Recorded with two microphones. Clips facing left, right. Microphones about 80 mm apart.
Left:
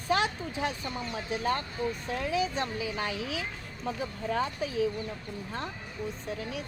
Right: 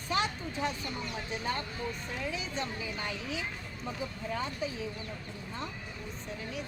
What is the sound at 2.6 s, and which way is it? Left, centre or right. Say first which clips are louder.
Speech: left 4 dB; left.